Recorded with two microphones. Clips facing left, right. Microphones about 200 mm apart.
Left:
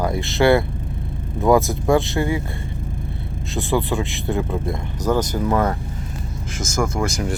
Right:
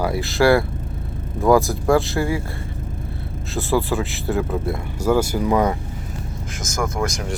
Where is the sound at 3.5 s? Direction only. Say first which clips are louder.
Right 1 dB; centre (ahead or behind).